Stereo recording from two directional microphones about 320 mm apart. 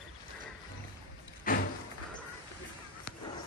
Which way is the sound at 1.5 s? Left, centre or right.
Left.